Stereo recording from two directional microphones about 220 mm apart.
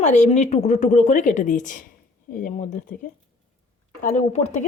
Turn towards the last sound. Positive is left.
turn(degrees=30)  # may be behind; listen again after turning